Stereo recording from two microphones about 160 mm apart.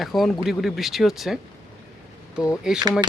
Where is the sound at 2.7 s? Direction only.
5° right (ahead or behind).